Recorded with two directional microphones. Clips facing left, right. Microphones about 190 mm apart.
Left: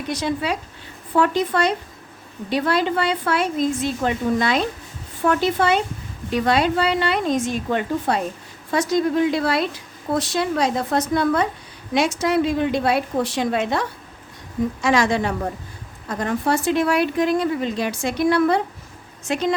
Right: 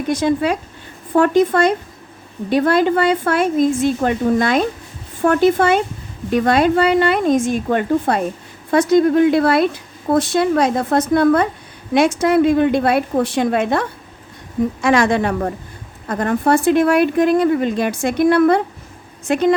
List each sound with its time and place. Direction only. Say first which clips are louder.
0.1 s a woman's voice: right 7 dB; 50° right (ahead or behind)